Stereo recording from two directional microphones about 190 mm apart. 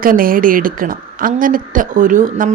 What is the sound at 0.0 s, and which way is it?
A woman's voice, 50° right (ahead or behind).